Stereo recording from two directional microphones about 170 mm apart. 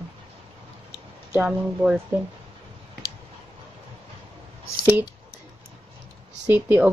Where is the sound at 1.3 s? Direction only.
10° right (ahead or behind).